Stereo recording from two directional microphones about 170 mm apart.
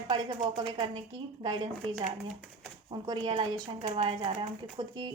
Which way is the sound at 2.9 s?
30° right (ahead or behind).